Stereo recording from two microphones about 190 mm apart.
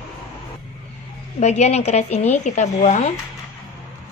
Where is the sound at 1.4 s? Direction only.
35° left (ahead or behind).